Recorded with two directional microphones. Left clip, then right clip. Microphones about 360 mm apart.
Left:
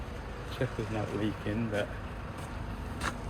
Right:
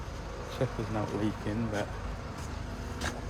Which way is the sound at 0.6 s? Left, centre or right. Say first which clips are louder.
Right 2 dB; centre.